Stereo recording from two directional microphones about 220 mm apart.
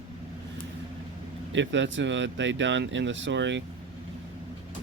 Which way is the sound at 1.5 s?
55° right (ahead or behind).